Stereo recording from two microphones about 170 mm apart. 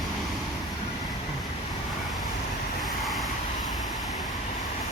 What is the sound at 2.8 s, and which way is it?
Vehicle, centre (ahead or behind).